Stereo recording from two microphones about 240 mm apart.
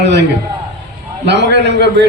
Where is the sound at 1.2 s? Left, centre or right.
Right.